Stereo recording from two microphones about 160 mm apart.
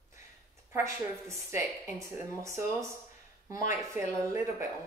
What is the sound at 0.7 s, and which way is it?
A woman's voice, 15° right (ahead or behind).